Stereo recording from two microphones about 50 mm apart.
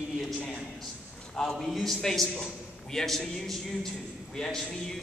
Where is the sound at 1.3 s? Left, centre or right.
Centre.